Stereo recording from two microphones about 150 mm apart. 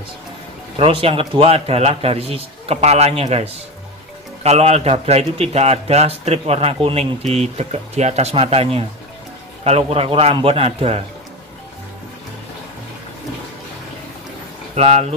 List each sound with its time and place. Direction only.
0.7 s a man's voice: 40° right (ahead or behind)
14.8 s a man's voice: 45° right (ahead or behind)